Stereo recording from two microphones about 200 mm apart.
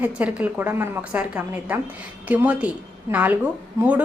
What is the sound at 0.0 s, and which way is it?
A woman's voice, 5° right (ahead or behind).